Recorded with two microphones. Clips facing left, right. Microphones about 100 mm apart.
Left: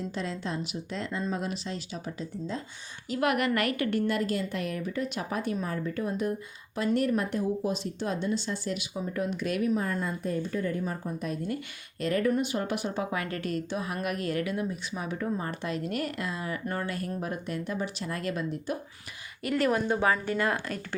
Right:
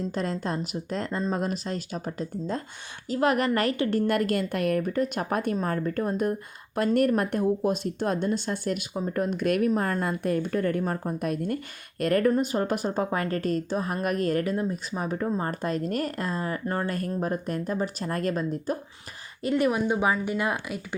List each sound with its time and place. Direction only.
0.1 s speech: 45° right (ahead or behind)
3.1 s a woman's voice: 35° right (ahead or behind)
4.0 s speech: 55° right (ahead or behind)
12.3 s a woman's voice: 40° right (ahead or behind)
19.4 s speech: 20° right (ahead or behind)